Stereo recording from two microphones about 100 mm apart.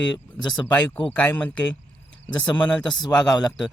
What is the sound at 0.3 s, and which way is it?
Speech, 45° left (ahead or behind).